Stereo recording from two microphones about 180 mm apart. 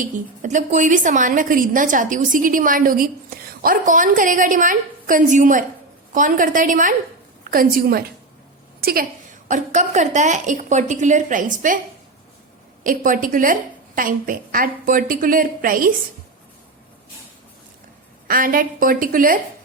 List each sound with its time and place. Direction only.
0.0 s a woman's voice: 40° right (ahead or behind)
9.5 s a woman's voice: 40° right (ahead or behind)
12.8 s a woman's voice: 50° right (ahead or behind)
18.3 s a woman's voice: 50° right (ahead or behind)